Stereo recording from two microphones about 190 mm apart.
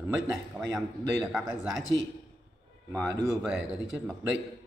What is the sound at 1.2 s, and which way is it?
Speech, 5° right (ahead or behind).